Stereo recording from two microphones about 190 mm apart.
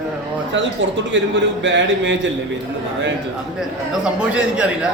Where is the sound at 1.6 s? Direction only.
75° right (ahead or behind).